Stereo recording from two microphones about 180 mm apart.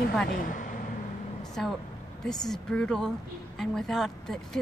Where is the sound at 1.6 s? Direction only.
Centre (ahead or behind).